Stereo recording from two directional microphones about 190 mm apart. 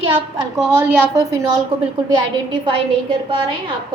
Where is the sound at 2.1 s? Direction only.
25° right (ahead or behind).